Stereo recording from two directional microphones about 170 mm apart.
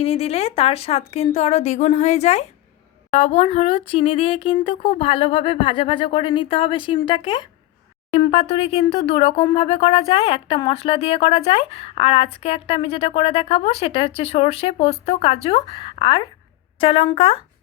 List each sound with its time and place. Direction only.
0.0 s a woman's voice: 35° left (ahead or behind)